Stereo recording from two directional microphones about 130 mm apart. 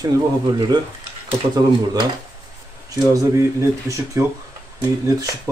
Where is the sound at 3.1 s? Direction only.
25° right (ahead or behind).